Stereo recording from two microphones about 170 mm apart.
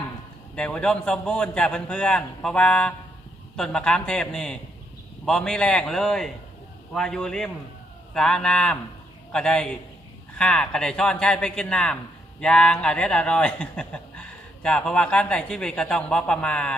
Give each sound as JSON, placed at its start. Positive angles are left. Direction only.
{"t": 0.5, "sound": "speech", "side_deg": 5}